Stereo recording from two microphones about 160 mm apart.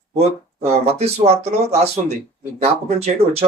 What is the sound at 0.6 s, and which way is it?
Speech, 40° right (ahead or behind).